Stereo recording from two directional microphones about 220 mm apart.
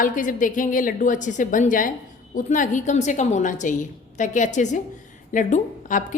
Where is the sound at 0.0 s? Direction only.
35° left (ahead or behind).